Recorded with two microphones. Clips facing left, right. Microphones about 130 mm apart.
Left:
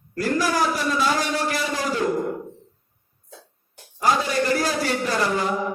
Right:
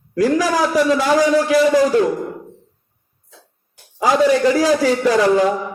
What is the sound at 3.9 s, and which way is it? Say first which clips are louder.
A man's voice: right 7 dB; 90° right.